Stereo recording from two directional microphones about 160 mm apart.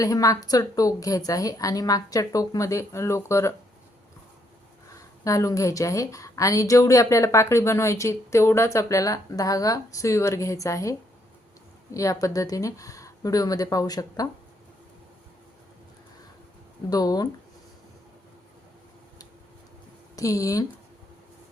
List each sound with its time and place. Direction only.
0.0 s speech: 20° left (ahead or behind)
5.2 s speech: 20° left (ahead or behind)
11.9 s speech: 20° left (ahead or behind)
16.9 s speech: 25° left (ahead or behind)
20.1 s speech: 20° left (ahead or behind)